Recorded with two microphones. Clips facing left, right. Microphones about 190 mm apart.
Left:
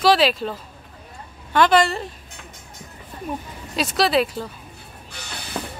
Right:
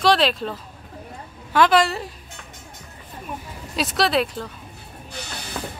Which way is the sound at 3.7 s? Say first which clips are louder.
Left 2 dB; centre (ahead or behind).